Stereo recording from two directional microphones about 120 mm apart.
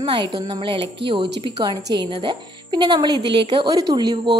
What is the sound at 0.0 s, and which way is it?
A woman's voice, 40° right (ahead or behind).